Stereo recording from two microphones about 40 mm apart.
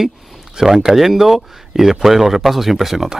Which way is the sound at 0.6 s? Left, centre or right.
Centre.